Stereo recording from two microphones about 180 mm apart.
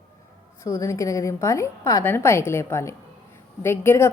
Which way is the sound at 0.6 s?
15° left (ahead or behind).